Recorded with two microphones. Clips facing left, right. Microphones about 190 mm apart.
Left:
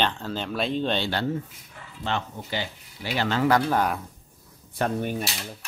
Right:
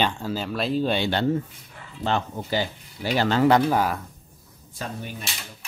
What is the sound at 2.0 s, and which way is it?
Speech, 40° right (ahead or behind).